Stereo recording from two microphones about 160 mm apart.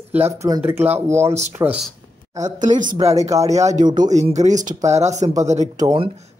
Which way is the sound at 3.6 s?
50° right (ahead or behind).